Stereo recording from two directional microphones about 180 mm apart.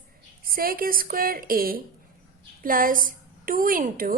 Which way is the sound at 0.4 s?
55° right (ahead or behind).